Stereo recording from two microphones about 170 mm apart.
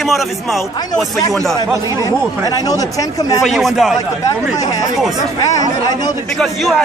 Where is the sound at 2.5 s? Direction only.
20° left (ahead or behind).